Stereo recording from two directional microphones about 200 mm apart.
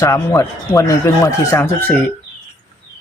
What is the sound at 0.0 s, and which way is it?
Speech, 15° left (ahead or behind).